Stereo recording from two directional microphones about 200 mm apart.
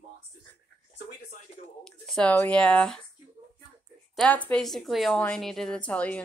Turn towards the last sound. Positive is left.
turn(degrees=5)  # may be behind; listen again after turning